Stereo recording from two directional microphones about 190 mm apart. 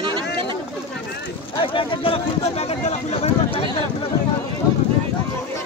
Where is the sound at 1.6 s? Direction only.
25° left (ahead or behind).